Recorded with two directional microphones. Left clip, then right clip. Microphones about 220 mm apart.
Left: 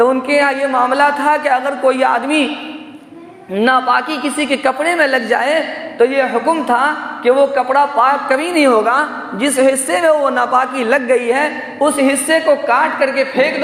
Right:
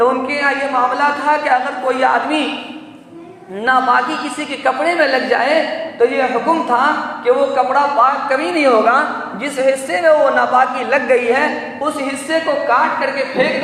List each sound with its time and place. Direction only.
0.0 s a sound: 55° left (ahead or behind)
0.9 s a man's voice: 50° left (ahead or behind)
3.6 s a man's voice: 55° left (ahead or behind)